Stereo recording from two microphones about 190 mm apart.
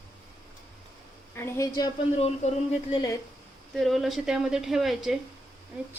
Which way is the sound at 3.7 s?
Centre (ahead or behind).